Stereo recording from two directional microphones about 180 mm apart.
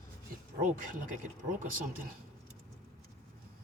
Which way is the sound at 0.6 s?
50° right (ahead or behind).